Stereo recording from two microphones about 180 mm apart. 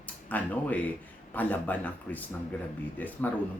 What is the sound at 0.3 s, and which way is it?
Speech, 10° left (ahead or behind).